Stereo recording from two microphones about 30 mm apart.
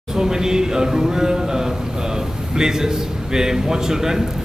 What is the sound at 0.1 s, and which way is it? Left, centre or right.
A man's voice, centre.